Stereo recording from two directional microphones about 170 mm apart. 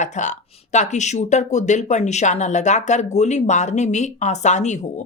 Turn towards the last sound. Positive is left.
turn(degrees=45)  # may be behind; listen again after turning